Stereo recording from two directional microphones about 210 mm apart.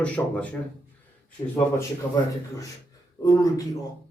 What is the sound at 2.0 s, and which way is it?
Speech, 10° left (ahead or behind).